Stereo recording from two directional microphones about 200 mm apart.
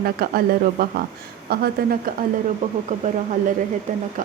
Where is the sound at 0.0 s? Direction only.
50° right (ahead or behind).